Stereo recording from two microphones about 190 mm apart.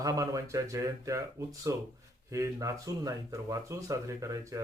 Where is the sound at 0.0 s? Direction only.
20° right (ahead or behind).